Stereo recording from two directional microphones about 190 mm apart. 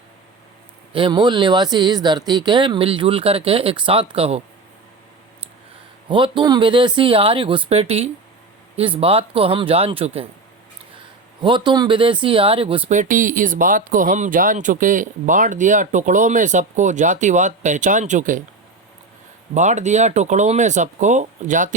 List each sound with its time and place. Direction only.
0.9 s speech: 25° right (ahead or behind)
6.1 s speech: 25° right (ahead or behind)
11.4 s speech: 25° right (ahead or behind)
13.0 s speech: 45° right (ahead or behind)
19.5 s speech: 40° right (ahead or behind)